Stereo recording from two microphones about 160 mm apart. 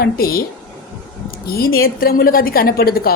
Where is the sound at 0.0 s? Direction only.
70° left (ahead or behind).